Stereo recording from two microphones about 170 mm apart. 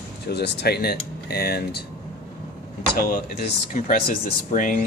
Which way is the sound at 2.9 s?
60° left (ahead or behind).